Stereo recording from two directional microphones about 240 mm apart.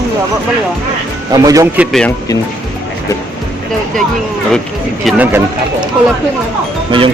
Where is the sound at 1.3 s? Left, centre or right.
Centre.